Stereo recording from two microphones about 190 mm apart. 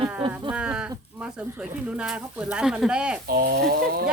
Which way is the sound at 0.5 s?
5° right (ahead or behind).